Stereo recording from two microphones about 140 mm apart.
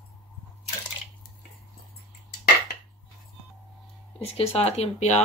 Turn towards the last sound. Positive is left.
turn(degrees=50)  # may be behind; listen again after turning